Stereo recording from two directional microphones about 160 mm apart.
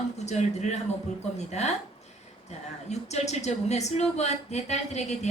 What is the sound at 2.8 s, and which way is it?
A woman's voice, 45° left (ahead or behind).